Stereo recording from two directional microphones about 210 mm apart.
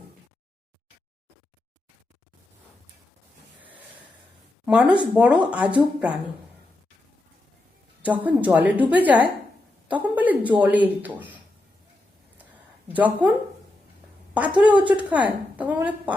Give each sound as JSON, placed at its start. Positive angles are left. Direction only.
{"t": 4.6, "sound": "speech", "side_deg": -5}
{"t": 8.0, "sound": "a woman's voice", "side_deg": -5}
{"t": 12.9, "sound": "speech", "side_deg": -10}
{"t": 14.3, "sound": "a woman's voice", "side_deg": -5}